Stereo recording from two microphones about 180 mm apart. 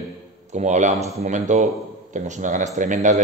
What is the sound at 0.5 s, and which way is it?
Speech, 40° right (ahead or behind).